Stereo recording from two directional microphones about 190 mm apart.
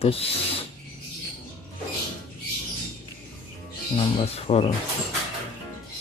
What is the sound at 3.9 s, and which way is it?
Speech, 30° left (ahead or behind).